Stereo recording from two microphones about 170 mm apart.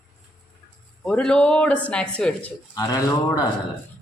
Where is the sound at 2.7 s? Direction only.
20° left (ahead or behind).